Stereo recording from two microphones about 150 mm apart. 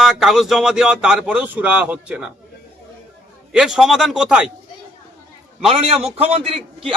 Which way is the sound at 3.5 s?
5° right (ahead or behind).